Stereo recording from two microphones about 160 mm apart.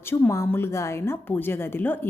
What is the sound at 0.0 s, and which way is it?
A woman's voice, 15° left (ahead or behind).